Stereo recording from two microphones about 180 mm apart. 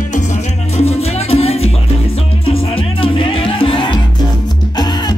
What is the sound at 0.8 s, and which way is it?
Music, 35° left (ahead or behind).